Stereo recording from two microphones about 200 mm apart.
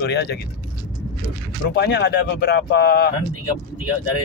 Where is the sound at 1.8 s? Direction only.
55° left (ahead or behind).